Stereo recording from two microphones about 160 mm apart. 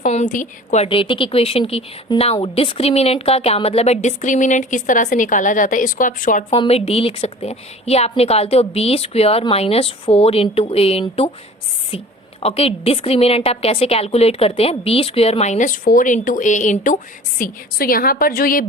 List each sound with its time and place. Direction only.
0.0 s a woman's voice: 50° left (ahead or behind)
0.9 s a woman's voice: 30° left (ahead or behind); by 6.4 s 55° left (ahead or behind)
6.5 s a woman's voice: 40° left (ahead or behind)
12.4 s a woman's voice: 40° left (ahead or behind); by 18.6 s 65° left (ahead or behind)